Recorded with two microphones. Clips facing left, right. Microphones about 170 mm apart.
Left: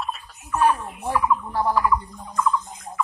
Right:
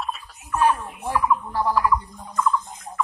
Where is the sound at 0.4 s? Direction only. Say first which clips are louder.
Even; 10° left (ahead or behind).